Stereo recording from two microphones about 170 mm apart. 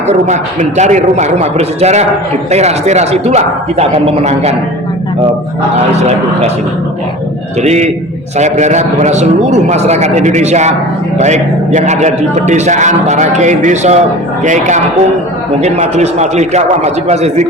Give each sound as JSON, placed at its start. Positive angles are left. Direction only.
{"t": 0.1, "sound": "a man's voice", "side_deg": -45}
{"t": 7.6, "sound": "a man's voice", "side_deg": -40}